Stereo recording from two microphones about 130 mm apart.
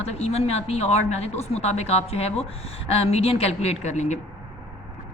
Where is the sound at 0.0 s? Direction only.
55° left (ahead or behind).